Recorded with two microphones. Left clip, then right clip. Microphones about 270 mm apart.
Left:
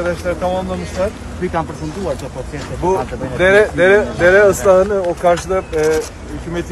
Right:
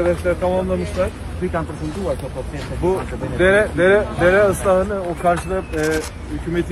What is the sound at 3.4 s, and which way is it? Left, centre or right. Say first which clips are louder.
Speech: left 4 dB; left.